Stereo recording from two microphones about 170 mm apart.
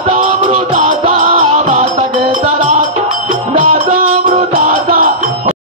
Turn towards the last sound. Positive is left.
turn(degrees=-55)  # may be behind; listen again after turning